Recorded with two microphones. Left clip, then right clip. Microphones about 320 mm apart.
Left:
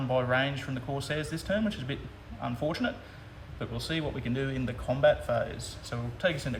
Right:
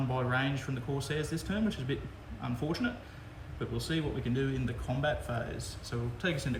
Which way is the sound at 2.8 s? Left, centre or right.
Centre.